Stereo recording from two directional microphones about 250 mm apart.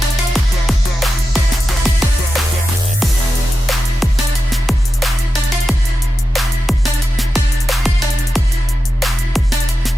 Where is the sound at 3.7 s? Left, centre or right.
Centre.